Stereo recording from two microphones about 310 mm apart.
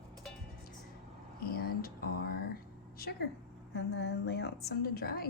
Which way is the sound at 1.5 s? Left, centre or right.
Left.